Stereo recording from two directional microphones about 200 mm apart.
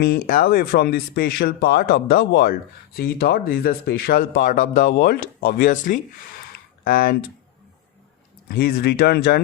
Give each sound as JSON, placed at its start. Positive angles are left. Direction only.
{"t": 0.0, "sound": "speech", "side_deg": 50}
{"t": 6.5, "sound": "a sound", "side_deg": 45}
{"t": 8.4, "sound": "speech", "side_deg": 50}